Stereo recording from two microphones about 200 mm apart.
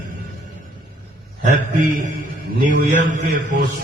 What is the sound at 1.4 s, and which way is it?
A man's voice, 40° right (ahead or behind).